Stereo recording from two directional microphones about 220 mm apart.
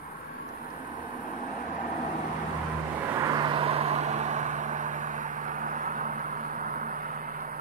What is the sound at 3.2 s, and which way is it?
Vehicle, 20° right (ahead or behind).